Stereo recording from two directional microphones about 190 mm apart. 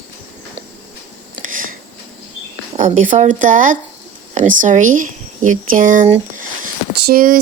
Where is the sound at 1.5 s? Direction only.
45° right (ahead or behind).